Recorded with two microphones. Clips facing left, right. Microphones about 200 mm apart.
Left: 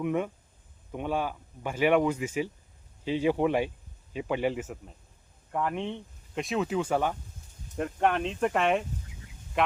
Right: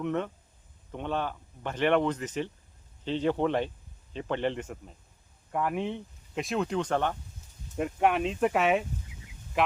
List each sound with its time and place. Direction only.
0.0 s speech: 10° left (ahead or behind)
7.8 s speech: 5° right (ahead or behind)
9.5 s a sound: centre (ahead or behind)